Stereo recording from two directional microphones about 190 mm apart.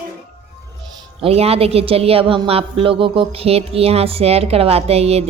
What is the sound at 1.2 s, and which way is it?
Speech, 30° right (ahead or behind).